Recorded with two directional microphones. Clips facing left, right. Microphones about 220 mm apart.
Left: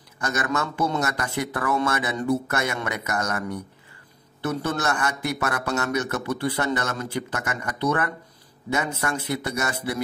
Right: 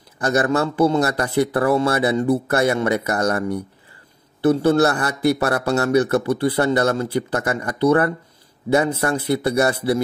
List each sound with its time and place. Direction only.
0.2 s speech: 35° right (ahead or behind)